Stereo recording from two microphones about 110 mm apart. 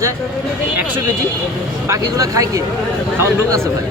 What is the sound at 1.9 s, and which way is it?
Speech, 30° right (ahead or behind).